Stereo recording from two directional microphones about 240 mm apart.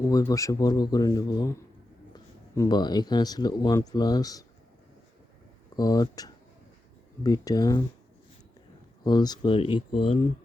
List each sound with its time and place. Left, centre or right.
0.0 s a man's voice: centre
5.7 s a man's voice: centre
9.0 s speech: centre